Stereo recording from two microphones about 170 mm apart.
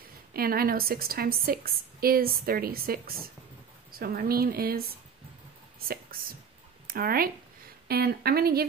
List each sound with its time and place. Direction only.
0.3 s a woman's voice: 60° right (ahead or behind)
6.9 s a woman's voice: 60° right (ahead or behind)